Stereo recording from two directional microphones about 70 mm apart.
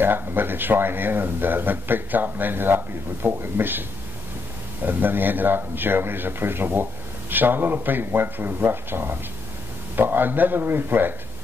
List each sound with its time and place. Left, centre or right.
0.0 s a man's voice: right
4.8 s a man's voice: right